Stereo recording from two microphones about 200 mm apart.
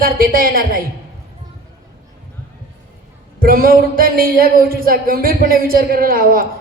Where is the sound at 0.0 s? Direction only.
45° right (ahead or behind).